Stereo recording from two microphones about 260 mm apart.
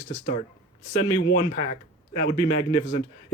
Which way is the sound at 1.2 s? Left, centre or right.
Left.